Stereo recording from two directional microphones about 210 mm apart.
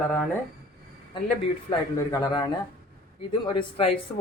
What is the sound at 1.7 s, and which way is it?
Speech, 20° left (ahead or behind).